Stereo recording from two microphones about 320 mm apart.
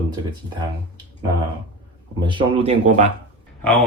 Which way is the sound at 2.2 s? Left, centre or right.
Centre.